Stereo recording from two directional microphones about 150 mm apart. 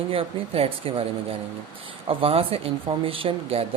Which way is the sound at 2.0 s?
40° right (ahead or behind).